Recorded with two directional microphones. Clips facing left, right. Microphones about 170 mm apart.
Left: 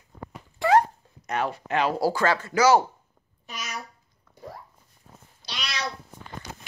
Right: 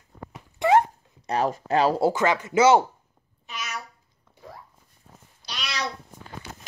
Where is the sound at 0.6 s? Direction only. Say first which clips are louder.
Right 1 dB; 25° right (ahead or behind).